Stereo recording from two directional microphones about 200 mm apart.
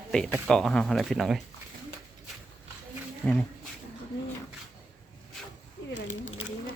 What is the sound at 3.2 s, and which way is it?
Speech, 5° left (ahead or behind).